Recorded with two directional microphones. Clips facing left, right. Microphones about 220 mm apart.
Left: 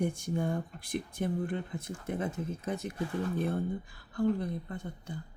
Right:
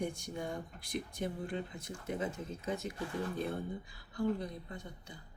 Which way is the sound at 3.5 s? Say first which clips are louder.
Left 6 dB; 55° left (ahead or behind).